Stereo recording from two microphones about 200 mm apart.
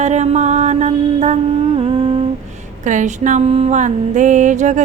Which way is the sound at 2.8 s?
40° right (ahead or behind).